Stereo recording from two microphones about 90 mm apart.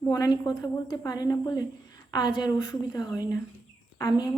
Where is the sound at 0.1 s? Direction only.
45° left (ahead or behind).